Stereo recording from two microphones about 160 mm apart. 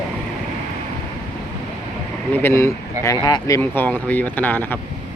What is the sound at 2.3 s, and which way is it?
Speech, 15° left (ahead or behind).